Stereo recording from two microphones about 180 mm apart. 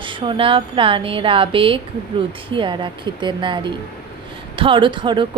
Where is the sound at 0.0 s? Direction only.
30° right (ahead or behind).